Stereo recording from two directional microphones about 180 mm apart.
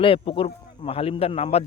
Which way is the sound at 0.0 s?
30° left (ahead or behind).